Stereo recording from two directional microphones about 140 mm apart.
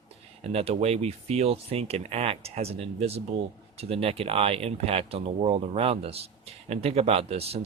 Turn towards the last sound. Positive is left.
turn(degrees=-45)  # may be behind; listen again after turning